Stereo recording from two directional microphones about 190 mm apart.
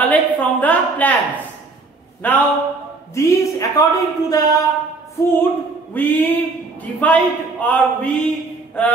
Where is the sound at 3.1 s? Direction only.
20° left (ahead or behind).